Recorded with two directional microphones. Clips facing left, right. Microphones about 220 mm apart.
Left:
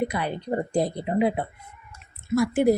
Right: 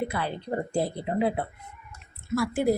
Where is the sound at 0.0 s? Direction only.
15° left (ahead or behind).